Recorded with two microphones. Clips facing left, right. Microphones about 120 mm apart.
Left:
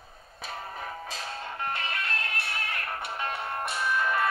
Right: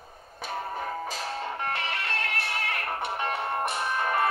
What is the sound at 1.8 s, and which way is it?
Music, 85° right.